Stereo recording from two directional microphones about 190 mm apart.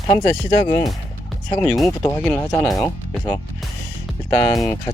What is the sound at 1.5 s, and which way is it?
Speech, 15° left (ahead or behind).